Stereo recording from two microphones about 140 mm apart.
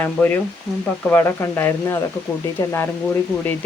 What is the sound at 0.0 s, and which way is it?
Speech, 15° left (ahead or behind).